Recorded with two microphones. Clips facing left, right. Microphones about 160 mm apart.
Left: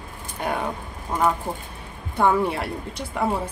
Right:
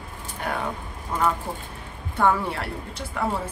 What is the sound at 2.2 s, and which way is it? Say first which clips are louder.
Speech: left 2 dB; 15° left (ahead or behind).